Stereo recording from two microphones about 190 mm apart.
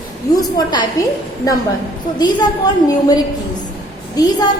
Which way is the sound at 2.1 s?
20° left (ahead or behind).